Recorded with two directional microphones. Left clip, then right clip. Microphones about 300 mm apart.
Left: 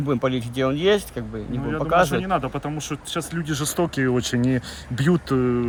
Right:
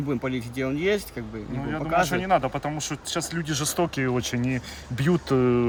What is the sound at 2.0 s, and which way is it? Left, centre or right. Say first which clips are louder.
Speech: right 1 dB; centre.